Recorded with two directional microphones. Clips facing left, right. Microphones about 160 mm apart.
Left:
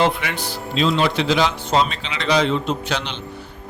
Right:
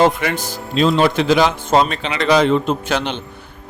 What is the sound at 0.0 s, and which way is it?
A man's voice, 45° right (ahead or behind).